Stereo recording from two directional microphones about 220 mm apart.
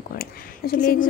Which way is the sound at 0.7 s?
40° left (ahead or behind).